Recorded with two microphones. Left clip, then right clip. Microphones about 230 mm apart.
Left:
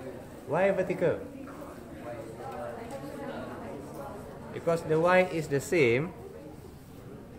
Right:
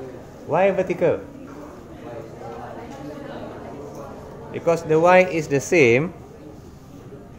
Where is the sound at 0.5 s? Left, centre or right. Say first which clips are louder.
Right 8 dB; right.